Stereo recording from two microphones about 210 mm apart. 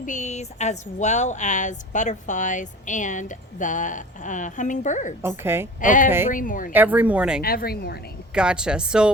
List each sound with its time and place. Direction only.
0.0 s speech: 35° left (ahead or behind)
5.4 s speech: 10° right (ahead or behind)
5.8 s speech: 40° left (ahead or behind)
6.7 s speech: 10° right (ahead or behind)
7.4 s speech: 45° left (ahead or behind)
8.3 s speech: 5° right (ahead or behind)